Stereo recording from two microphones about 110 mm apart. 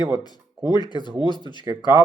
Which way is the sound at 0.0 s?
40° left (ahead or behind).